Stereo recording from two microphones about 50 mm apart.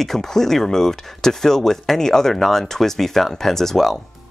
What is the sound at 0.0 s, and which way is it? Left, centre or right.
Speech, centre.